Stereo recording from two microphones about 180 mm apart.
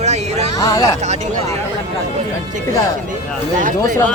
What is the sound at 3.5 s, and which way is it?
Speech, 45° right (ahead or behind).